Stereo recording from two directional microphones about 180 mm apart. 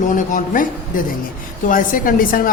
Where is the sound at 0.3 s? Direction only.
50° left (ahead or behind).